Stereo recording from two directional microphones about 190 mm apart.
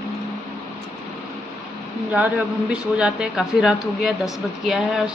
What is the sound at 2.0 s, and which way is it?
A man's voice, 10° right (ahead or behind).